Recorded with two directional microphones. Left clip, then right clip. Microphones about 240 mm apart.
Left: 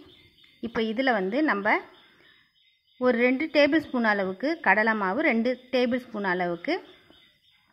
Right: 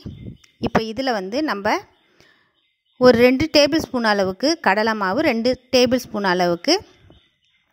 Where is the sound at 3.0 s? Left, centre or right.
Right.